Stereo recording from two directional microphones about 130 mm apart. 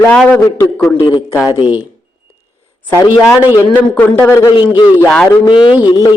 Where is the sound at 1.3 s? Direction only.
25° left (ahead or behind).